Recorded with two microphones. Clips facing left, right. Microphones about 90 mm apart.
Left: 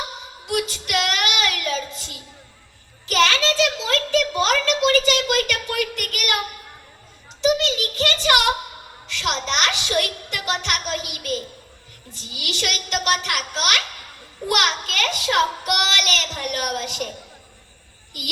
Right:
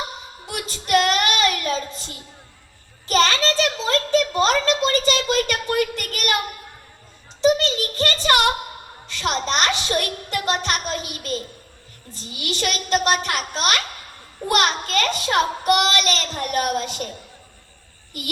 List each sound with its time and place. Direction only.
0.4 s child singing: 35° right (ahead or behind)
3.1 s a child's voice: 35° right (ahead or behind)
7.4 s a child's voice: 35° right (ahead or behind)